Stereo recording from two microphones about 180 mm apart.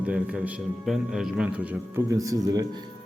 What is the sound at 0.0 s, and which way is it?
A man's voice, 5° right (ahead or behind).